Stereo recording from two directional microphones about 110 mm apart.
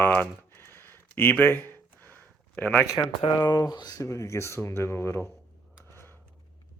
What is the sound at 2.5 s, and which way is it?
Speech, 15° left (ahead or behind).